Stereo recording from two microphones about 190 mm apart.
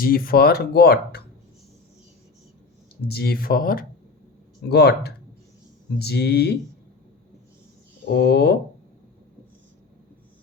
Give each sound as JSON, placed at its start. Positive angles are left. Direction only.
{"t": 0.0, "sound": "speech", "side_deg": 50}
{"t": 3.1, "sound": "speech", "side_deg": 55}
{"t": 8.0, "sound": "speech", "side_deg": 60}